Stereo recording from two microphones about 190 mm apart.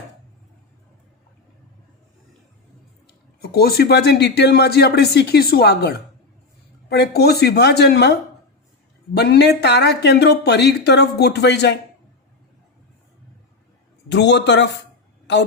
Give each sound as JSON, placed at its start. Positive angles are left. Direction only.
{"t": 3.1, "sound": "speech", "side_deg": 55}
{"t": 14.1, "sound": "speech", "side_deg": 65}